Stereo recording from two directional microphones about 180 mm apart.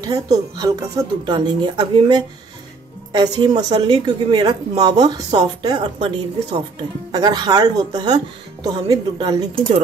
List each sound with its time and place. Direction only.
0.0 s speech: 20° right (ahead or behind)